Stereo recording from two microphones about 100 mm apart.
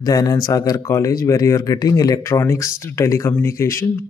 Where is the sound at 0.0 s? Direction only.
35° left (ahead or behind).